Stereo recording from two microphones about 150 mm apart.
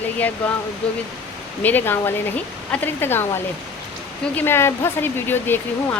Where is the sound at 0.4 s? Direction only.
5° left (ahead or behind).